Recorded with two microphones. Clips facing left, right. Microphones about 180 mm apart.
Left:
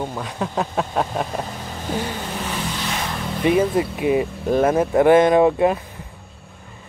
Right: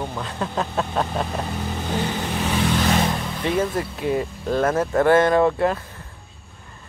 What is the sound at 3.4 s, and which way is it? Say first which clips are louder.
Speech: left 5 dB; 15° left (ahead or behind).